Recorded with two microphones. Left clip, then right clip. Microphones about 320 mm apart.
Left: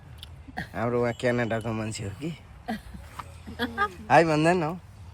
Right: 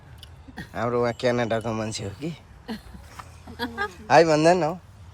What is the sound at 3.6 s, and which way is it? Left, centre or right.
Speech, left.